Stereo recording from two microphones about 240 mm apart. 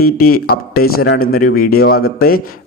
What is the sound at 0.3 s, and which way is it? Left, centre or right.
Speech, left.